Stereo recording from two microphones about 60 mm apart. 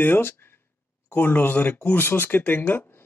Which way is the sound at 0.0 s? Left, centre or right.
Left.